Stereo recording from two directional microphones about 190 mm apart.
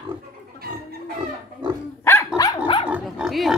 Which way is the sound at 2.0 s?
15° left (ahead or behind).